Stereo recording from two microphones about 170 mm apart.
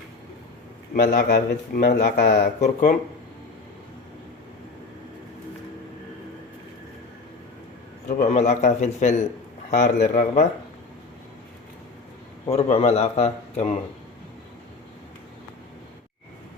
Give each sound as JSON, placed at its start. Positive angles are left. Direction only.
{"t": 0.9, "sound": "a man's voice", "side_deg": 50}
{"t": 8.0, "sound": "a man's voice", "side_deg": 45}
{"t": 12.5, "sound": "speech", "side_deg": 35}